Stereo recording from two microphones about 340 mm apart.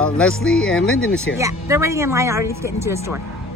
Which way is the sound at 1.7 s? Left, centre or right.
Centre.